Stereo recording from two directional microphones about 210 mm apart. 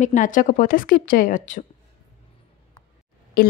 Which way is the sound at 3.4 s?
45° left (ahead or behind).